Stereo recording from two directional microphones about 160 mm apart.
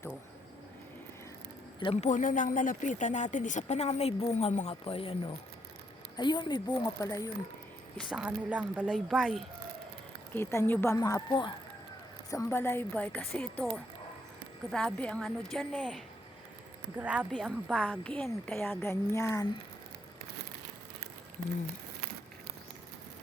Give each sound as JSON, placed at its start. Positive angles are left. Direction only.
{"t": 1.8, "sound": "speech", "side_deg": 40}
{"t": 8.1, "sound": "a woman's voice", "side_deg": -5}
{"t": 10.3, "sound": "a woman's voice", "side_deg": 15}
{"t": 17.0, "sound": "a woman's voice", "side_deg": -5}
{"t": 18.0, "sound": "a woman's voice", "side_deg": 5}